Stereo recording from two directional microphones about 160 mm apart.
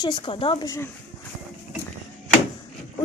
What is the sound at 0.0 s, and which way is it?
Speech, 30° left (ahead or behind).